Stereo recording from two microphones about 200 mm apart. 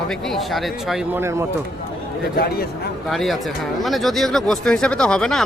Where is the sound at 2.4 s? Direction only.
50° left (ahead or behind).